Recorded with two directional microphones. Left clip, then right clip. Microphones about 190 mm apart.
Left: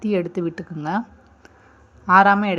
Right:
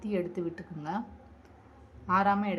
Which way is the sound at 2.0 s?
30° left (ahead or behind).